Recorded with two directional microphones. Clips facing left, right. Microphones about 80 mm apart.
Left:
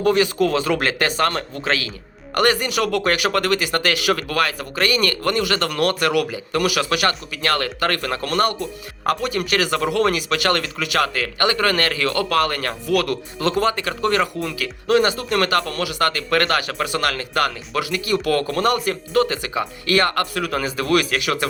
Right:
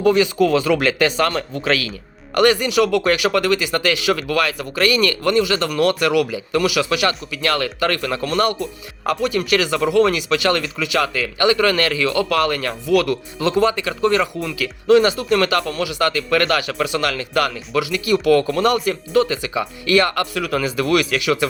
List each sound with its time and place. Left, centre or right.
0.0 s speech: left
2.3 s speech: left